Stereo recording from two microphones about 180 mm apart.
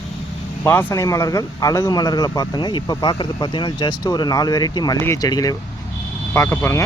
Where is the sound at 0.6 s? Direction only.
10° left (ahead or behind).